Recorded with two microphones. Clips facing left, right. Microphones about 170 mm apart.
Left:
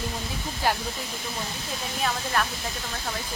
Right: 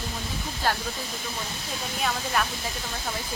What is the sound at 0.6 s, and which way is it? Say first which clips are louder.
Speech: left 1 dB; 15° left (ahead or behind).